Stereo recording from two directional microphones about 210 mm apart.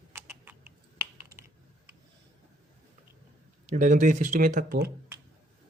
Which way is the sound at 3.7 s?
35° right (ahead or behind).